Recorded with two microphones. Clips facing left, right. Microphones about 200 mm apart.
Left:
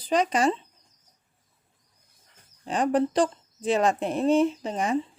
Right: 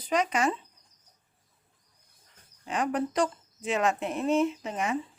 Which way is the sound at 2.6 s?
30° left (ahead or behind).